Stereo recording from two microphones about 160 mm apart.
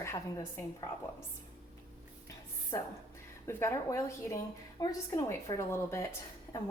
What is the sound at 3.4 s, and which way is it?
A woman's voice, 15° left (ahead or behind).